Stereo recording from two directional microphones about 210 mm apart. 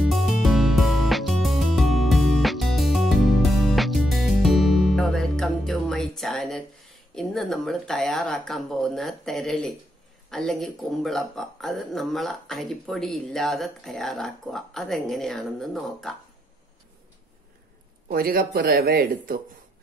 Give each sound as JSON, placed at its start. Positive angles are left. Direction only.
{"t": 0.0, "sound": "music", "side_deg": 0}
{"t": 7.2, "sound": "speech", "side_deg": 0}
{"t": 18.0, "sound": "speech", "side_deg": -45}